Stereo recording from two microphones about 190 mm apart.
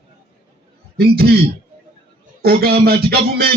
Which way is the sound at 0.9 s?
55° right (ahead or behind).